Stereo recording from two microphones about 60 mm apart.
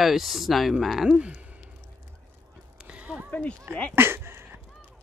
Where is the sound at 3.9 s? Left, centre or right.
Right.